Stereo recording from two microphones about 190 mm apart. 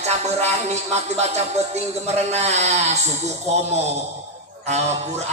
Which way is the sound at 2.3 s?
35° right (ahead or behind).